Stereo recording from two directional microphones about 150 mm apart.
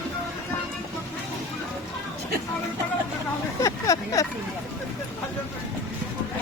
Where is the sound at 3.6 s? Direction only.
20° left (ahead or behind).